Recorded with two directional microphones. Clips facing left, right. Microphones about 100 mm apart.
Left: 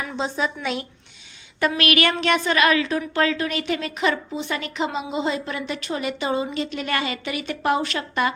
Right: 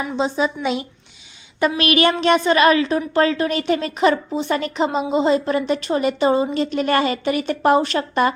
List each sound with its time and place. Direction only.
0.0 s a woman's voice: 20° right (ahead or behind); by 8.3 s 35° right (ahead or behind)